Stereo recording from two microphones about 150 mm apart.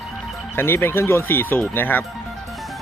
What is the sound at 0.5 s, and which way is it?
Speech, 15° left (ahead or behind).